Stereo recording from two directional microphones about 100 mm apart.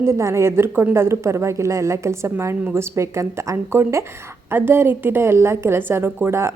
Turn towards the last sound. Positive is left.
turn(degrees=-25)  # may be behind; listen again after turning